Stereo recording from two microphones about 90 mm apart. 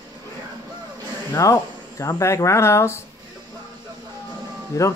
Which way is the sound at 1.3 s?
40° left (ahead or behind).